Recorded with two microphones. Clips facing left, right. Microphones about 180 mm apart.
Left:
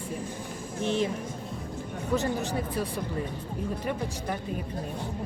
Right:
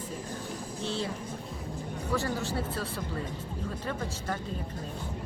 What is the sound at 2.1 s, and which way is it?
Speech, 20° left (ahead or behind).